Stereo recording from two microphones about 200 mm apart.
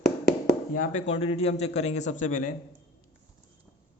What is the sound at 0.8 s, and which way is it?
A man's voice, 35° left (ahead or behind).